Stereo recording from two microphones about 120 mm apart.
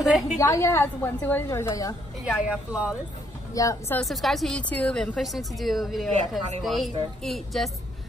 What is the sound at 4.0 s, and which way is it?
A woman's voice, centre (ahead or behind).